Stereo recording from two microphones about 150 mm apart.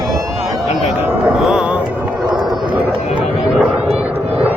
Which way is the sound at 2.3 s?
30° right (ahead or behind).